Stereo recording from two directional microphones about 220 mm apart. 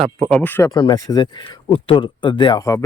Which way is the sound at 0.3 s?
5° left (ahead or behind).